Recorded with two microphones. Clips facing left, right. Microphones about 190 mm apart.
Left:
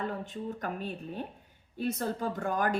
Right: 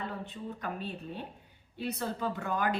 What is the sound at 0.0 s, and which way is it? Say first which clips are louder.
Speech: left 4 dB; 45° left (ahead or behind).